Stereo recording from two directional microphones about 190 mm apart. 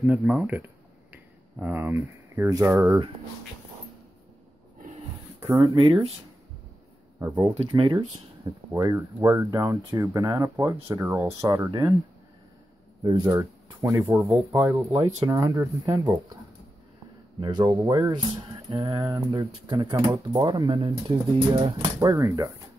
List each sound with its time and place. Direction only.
0.0 s speech: 5° right (ahead or behind)
5.6 s speech: 30° right (ahead or behind)
7.4 s speech: 25° right (ahead or behind)
13.0 s speech: 25° right (ahead or behind)
17.4 s speech: 25° right (ahead or behind)